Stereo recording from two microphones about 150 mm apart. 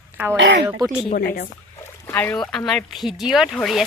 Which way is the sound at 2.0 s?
10° left (ahead or behind).